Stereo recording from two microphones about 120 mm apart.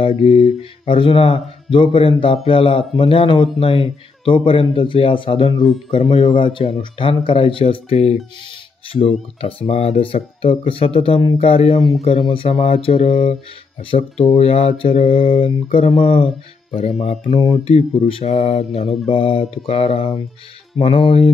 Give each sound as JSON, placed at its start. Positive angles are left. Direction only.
{"t": 0.0, "sound": "speech", "side_deg": 50}
{"t": 9.4, "sound": "speech", "side_deg": 55}
{"t": 17.0, "sound": "speech", "side_deg": 65}
{"t": 17.6, "sound": "speech", "side_deg": 55}
{"t": 18.7, "sound": "mantra", "side_deg": 0}
{"t": 19.1, "sound": "speech", "side_deg": 50}